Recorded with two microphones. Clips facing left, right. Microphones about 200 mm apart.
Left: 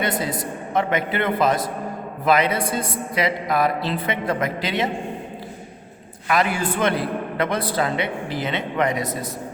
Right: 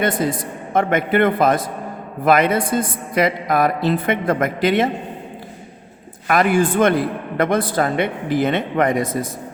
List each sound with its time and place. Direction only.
0.7 s a man's voice: 50° right (ahead or behind)
6.2 s a man's voice: 50° right (ahead or behind)